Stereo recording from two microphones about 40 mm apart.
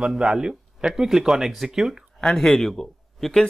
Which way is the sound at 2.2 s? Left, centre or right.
Centre.